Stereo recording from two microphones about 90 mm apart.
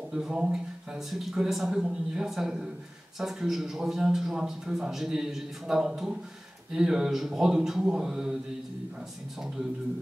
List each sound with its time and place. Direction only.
0.1 s a man's voice: 10° right (ahead or behind)